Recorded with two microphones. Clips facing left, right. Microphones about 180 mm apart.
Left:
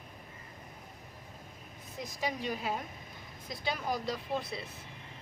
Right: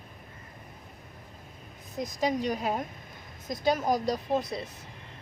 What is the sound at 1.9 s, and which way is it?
A woman's voice, 45° right (ahead or behind).